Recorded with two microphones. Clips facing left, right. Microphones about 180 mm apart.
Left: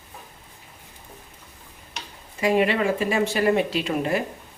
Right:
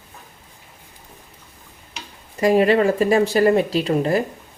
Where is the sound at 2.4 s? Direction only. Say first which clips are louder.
Right 5 dB; 40° right (ahead or behind).